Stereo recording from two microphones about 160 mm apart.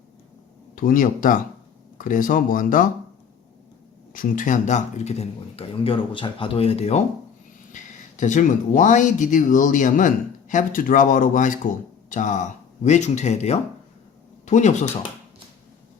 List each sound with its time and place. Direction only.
0.8 s speech: 60° left (ahead or behind)
4.1 s speech: 60° left (ahead or behind)